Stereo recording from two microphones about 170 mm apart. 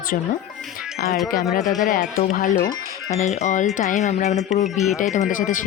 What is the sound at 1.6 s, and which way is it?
Speech, centre (ahead or behind).